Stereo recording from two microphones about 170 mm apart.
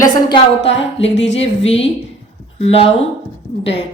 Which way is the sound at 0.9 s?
35° left (ahead or behind).